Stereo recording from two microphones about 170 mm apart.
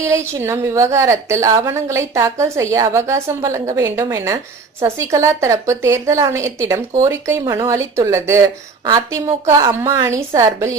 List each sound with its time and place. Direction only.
0.0 s a woman's voice: 15° right (ahead or behind)